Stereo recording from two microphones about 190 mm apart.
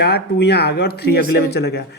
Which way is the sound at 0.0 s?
60° left (ahead or behind).